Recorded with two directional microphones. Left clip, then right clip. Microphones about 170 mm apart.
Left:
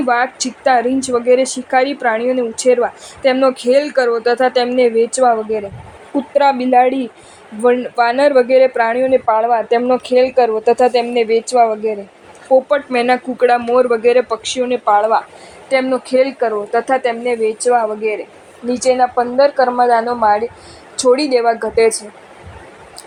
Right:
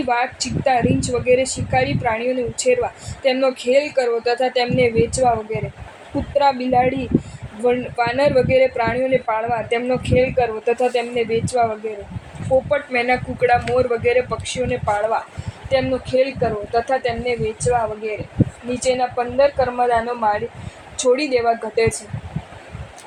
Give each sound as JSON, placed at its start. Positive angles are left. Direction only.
{"t": 0.1, "sound": "speech", "side_deg": 35}
{"t": 6.3, "sound": "speech", "side_deg": 35}
{"t": 12.7, "sound": "speech", "side_deg": 35}